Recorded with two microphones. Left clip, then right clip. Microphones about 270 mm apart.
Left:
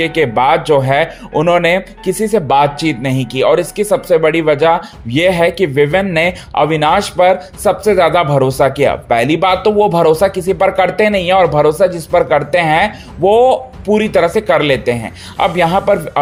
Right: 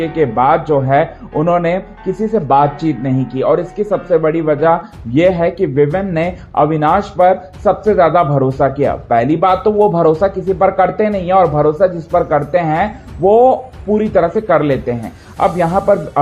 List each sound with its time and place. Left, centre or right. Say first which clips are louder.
0.0 s speech: left 1 dB; left